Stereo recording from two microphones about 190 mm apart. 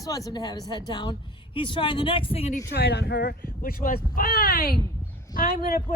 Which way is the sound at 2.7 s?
60° left (ahead or behind).